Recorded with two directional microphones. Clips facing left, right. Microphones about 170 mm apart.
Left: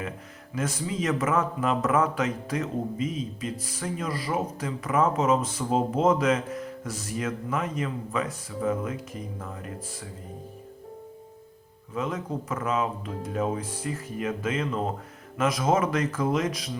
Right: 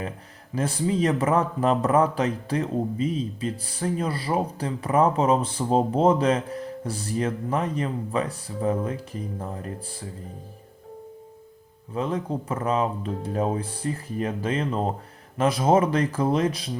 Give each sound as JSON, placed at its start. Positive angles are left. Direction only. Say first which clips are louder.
{"t": 0.5, "sound": "speech", "louder": "right 5 dB", "side_deg": -30}
{"t": 11.9, "sound": "speech", "louder": "right 3 dB", "side_deg": -30}